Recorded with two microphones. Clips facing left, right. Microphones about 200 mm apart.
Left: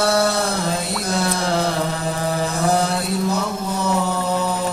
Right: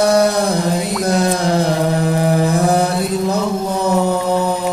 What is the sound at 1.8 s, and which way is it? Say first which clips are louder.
Mantra: right 7 dB; 55° right (ahead or behind).